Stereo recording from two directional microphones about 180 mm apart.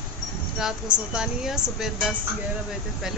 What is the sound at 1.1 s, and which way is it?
Speech, 5° right (ahead or behind).